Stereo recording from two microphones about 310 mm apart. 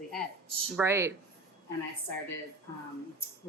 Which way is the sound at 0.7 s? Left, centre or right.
Centre.